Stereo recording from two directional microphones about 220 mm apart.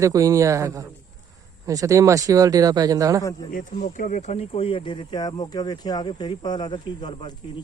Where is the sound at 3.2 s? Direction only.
15° left (ahead or behind).